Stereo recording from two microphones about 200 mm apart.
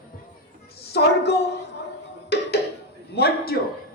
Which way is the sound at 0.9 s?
55° left (ahead or behind).